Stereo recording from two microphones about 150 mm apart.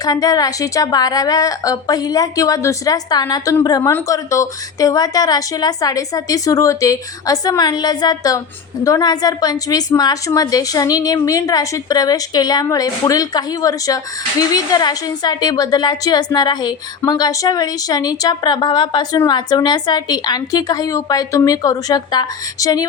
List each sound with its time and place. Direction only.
0.0 s a woman's voice: 25° left (ahead or behind)